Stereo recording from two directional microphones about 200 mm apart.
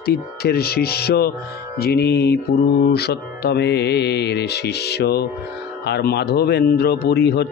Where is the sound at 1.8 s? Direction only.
55° left (ahead or behind).